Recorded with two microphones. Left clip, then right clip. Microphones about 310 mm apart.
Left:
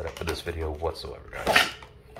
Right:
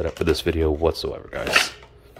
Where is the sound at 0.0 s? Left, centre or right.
Right.